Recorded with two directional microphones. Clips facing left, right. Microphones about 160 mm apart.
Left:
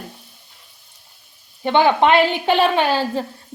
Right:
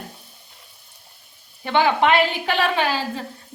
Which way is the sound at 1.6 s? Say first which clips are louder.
Left 3 dB; 30° left (ahead or behind).